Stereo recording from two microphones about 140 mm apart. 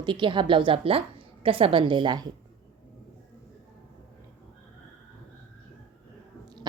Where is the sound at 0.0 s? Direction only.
35° right (ahead or behind).